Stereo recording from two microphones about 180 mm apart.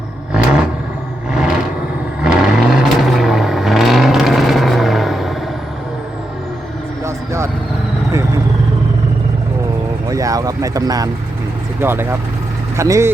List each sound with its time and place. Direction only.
0.3 s vehicle: 5° right (ahead or behind)
7.0 s vehicle: 15° right (ahead or behind)
10.1 s a sound: 20° right (ahead or behind)
11.8 s speech: 10° right (ahead or behind)